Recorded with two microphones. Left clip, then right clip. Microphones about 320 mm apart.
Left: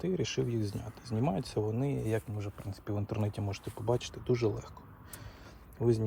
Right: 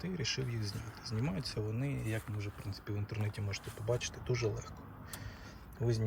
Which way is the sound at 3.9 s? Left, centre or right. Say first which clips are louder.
Left 5 dB; centre.